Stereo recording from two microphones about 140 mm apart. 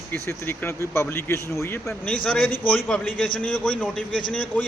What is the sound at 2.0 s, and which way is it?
A man's voice, 10° left (ahead or behind).